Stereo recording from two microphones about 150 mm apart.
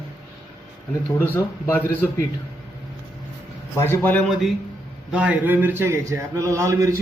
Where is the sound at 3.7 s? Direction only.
15° left (ahead or behind).